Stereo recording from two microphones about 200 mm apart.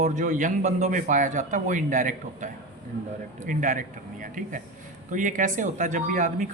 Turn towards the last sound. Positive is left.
turn(degrees=-40)  # may be behind; listen again after turning